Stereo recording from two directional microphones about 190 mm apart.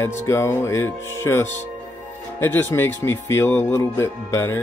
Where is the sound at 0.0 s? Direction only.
15° left (ahead or behind).